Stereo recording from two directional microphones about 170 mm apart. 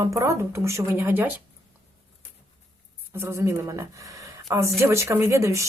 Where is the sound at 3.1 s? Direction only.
15° right (ahead or behind).